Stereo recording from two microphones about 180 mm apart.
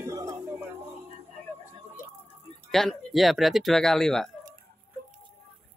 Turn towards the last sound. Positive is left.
turn(degrees=0)  # may be behind; listen again after turning